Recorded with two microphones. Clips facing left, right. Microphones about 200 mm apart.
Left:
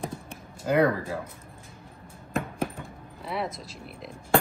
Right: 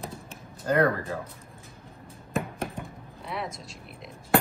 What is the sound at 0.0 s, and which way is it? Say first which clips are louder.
Computer keyboard: left 4 dB; 10° left (ahead or behind).